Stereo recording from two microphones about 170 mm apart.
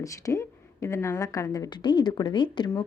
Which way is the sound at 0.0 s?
20° left (ahead or behind).